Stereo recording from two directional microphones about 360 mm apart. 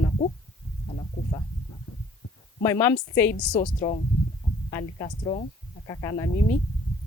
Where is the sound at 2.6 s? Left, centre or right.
Centre.